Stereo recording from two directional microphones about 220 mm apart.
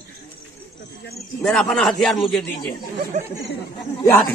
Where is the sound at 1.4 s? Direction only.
5° left (ahead or behind).